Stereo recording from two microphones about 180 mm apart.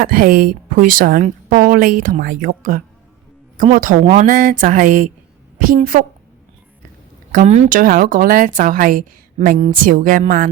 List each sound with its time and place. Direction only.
0.0 s a woman's voice: 55° right (ahead or behind)
7.3 s a woman's voice: 45° right (ahead or behind)